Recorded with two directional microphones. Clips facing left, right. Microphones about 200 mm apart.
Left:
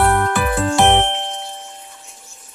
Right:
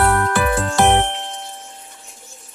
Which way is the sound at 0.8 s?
20° left (ahead or behind).